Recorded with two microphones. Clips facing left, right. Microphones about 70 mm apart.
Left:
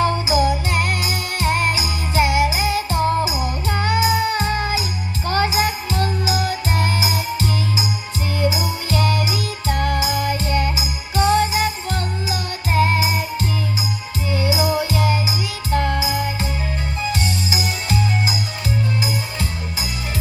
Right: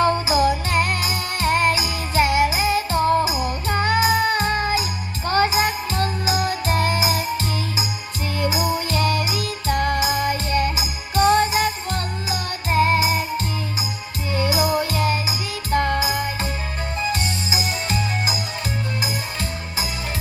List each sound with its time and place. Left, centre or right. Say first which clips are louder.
0.0 s music: even; right
10.8 s jingle bell: even; right
14.3 s music: even; right